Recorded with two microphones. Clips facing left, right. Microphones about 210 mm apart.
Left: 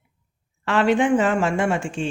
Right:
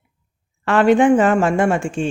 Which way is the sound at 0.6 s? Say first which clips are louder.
Right 5 dB; 50° right (ahead or behind).